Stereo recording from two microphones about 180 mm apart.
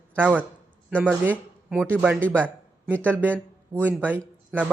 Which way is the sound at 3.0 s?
10° right (ahead or behind).